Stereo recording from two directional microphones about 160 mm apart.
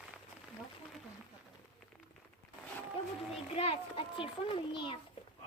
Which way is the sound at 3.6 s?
35° left (ahead or behind).